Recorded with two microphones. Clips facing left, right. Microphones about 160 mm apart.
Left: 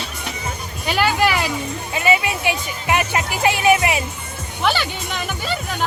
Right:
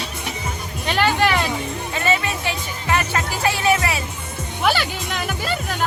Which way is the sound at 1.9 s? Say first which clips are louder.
Left 3 dB; 10° left (ahead or behind).